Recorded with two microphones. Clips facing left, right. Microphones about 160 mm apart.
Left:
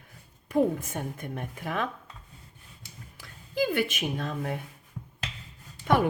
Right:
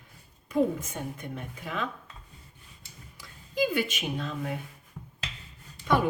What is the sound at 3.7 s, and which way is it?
Speech, 55° left (ahead or behind).